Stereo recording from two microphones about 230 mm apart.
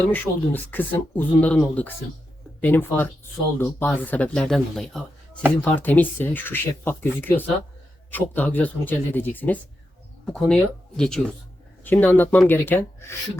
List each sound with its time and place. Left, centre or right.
0.1 s speech: centre